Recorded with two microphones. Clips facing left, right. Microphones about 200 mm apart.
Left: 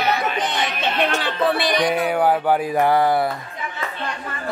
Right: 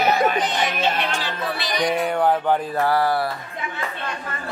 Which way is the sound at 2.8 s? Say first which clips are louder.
Left 3 dB; 20° left (ahead or behind).